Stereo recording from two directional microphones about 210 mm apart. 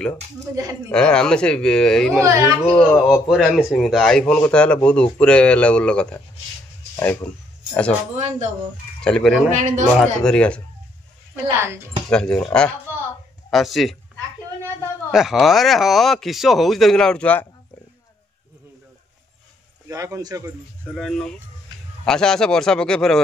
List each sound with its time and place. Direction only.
0.9 s a man's voice: 5° left (ahead or behind)
2.2 s a man's voice: 15° right (ahead or behind)
2.6 s a man's voice: 5° left (ahead or behind)
9.0 s a man's voice: 5° left (ahead or behind)
9.5 s a man's voice: 35° right (ahead or behind)
9.9 s a man's voice: 5° left (ahead or behind)
11.4 s a man's voice: 10° right (ahead or behind)
12.1 s a man's voice: 5° left (ahead or behind)
12.9 s a sound: 10° right (ahead or behind)
13.5 s a man's voice: centre (ahead or behind)
15.0 s a man's voice: centre (ahead or behind)
19.9 s a man's voice: 15° right (ahead or behind)
20.8 s a man's voice: 5° left (ahead or behind)